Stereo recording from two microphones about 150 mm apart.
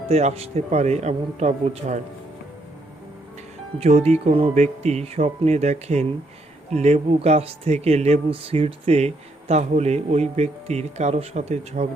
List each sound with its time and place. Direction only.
0.1 s speech: 45° right (ahead or behind)
3.8 s speech: 45° right (ahead or behind)